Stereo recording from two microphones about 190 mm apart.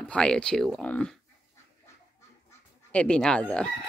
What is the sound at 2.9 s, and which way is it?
Speech, 5° left (ahead or behind).